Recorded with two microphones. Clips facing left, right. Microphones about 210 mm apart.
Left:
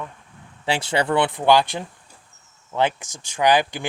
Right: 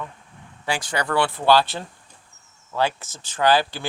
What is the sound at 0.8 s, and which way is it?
Speech, 25° left (ahead or behind).